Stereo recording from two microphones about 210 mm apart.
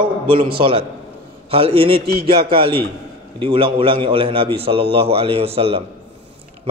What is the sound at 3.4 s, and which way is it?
A man's voice, 25° right (ahead or behind).